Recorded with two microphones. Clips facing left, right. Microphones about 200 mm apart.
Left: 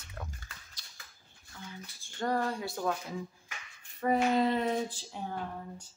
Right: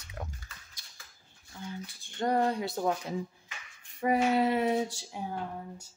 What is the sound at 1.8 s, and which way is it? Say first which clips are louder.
Speech: right 2 dB; 20° right (ahead or behind).